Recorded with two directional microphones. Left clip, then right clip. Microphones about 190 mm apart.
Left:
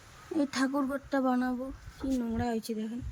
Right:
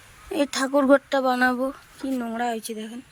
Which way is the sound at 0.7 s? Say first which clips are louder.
Right 13 dB; 35° right (ahead or behind).